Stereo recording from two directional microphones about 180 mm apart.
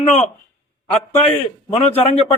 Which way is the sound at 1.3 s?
35° left (ahead or behind).